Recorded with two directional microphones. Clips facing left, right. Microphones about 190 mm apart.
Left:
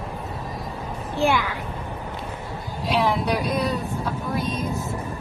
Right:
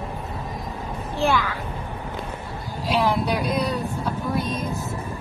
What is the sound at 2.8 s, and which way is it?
Speech, centre (ahead or behind).